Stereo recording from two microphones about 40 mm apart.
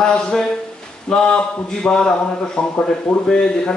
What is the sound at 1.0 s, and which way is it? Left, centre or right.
Speech, centre.